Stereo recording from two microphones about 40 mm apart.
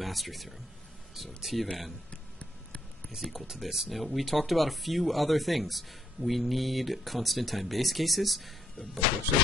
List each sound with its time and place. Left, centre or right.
0.0 s speech: centre
2.0 s a sound: left
3.2 s speech: centre